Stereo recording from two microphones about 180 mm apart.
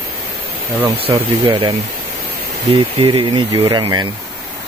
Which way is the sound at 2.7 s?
30° right (ahead or behind).